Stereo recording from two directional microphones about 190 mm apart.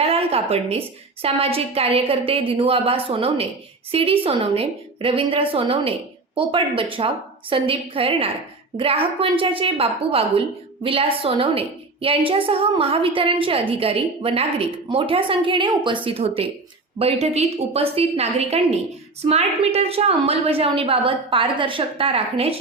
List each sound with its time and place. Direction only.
0.0 s a woman's voice: 30° right (ahead or behind)